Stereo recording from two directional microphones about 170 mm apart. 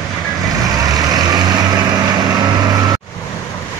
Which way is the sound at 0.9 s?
20° right (ahead or behind).